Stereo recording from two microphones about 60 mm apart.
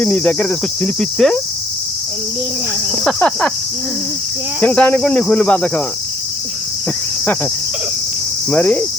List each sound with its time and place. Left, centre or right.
0.0 s cricket: left
3.2 s speech: centre
4.6 s speech: centre
8.4 s speech: left